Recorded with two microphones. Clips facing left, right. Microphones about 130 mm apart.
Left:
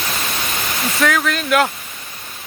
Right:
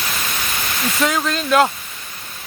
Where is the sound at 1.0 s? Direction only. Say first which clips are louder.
Left 2 dB; 25° right (ahead or behind).